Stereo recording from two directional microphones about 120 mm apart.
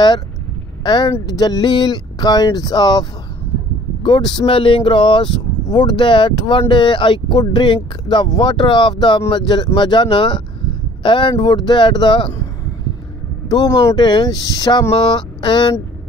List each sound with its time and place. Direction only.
0.8 s speech: 40° left (ahead or behind)
13.5 s speech: 30° left (ahead or behind)